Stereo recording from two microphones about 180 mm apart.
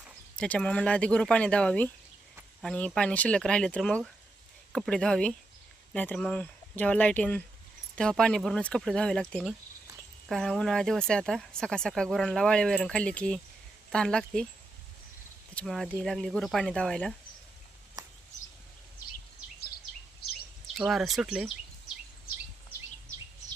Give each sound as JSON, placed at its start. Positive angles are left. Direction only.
{"t": 0.0, "sound": "speech", "side_deg": 5}
{"t": 15.5, "sound": "speech", "side_deg": 0}
{"t": 20.7, "sound": "speech", "side_deg": 0}